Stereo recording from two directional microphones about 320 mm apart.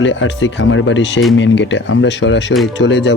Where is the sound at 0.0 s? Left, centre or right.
Left.